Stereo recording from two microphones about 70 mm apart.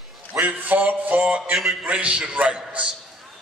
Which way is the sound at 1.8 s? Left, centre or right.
Centre.